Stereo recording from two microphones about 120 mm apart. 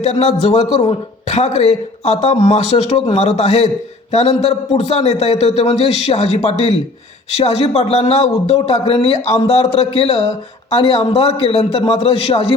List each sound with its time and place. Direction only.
0.0 s a man's voice: 70° left (ahead or behind)